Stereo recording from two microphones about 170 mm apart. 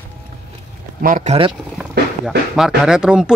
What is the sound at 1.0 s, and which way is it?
Speech, 55° right (ahead or behind).